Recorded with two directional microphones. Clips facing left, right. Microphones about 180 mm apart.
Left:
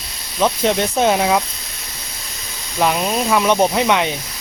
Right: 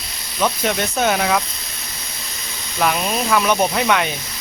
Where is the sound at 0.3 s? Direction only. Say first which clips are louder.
Left 3 dB; 20° left (ahead or behind).